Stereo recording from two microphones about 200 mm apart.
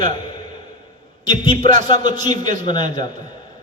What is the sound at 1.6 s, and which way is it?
Speech, 40° right (ahead or behind).